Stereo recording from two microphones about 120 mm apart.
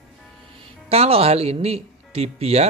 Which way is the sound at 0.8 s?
55° right (ahead or behind).